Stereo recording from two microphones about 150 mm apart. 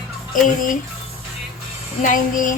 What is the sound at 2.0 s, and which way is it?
Speech, 60° left (ahead or behind).